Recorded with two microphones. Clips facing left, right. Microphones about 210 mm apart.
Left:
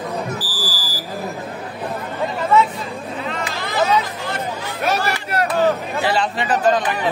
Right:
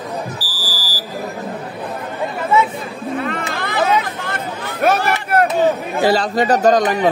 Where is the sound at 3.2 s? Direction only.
55° right (ahead or behind).